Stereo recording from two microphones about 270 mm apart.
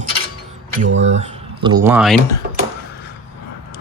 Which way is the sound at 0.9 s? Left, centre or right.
Right.